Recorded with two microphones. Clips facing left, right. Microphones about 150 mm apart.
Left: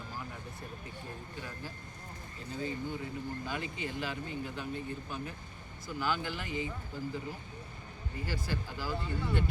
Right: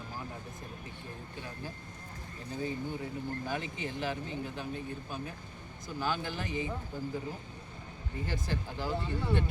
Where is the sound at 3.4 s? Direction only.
20° right (ahead or behind).